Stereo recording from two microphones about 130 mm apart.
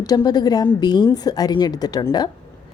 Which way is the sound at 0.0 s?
30° left (ahead or behind).